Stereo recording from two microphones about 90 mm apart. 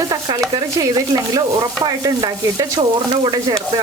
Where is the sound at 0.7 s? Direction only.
45° right (ahead or behind).